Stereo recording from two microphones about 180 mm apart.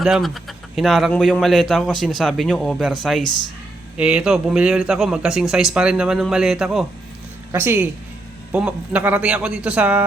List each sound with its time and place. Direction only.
0.0 s a man's voice: centre (ahead or behind)